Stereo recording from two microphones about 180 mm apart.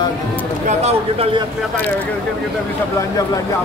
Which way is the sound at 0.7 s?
35° right (ahead or behind).